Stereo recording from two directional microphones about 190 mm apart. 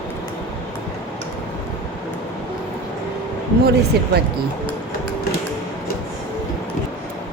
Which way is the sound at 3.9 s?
60° right (ahead or behind).